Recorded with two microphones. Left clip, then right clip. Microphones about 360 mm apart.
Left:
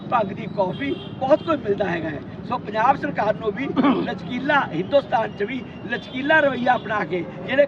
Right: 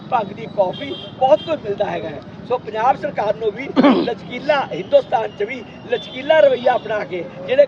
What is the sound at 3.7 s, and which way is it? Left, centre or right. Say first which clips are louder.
Speech: right 7 dB; right.